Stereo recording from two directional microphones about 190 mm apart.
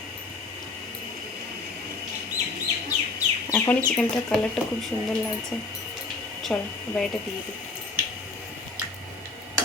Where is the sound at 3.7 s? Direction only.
10° left (ahead or behind).